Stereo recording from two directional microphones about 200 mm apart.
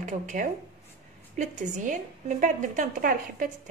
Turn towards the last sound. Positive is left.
turn(degrees=-45)  # may be behind; listen again after turning